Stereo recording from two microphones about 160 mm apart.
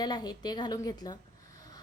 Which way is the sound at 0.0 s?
25° left (ahead or behind).